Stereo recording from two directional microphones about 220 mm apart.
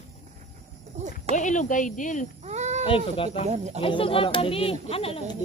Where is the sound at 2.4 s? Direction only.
30° right (ahead or behind).